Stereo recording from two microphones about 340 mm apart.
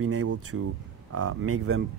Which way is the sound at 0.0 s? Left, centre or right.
Right.